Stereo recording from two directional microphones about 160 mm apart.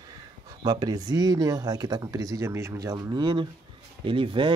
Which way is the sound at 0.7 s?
25° right (ahead or behind).